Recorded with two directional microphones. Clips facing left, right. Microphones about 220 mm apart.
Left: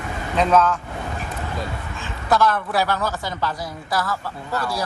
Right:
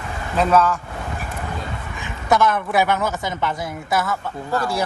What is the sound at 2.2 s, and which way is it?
A woman's voice, 20° right (ahead or behind).